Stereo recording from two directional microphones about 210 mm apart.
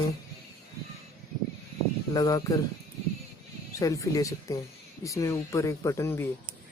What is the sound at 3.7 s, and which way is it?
Speech, 15° left (ahead or behind).